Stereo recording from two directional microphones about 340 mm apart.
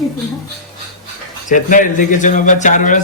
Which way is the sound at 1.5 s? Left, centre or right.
Left.